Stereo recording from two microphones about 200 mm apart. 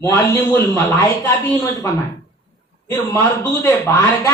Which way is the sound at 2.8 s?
15° left (ahead or behind).